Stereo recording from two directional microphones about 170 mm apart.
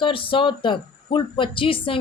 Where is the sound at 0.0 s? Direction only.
30° left (ahead or behind).